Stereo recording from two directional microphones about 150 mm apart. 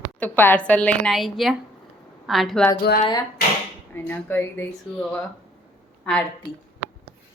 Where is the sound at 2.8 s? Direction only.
90° left.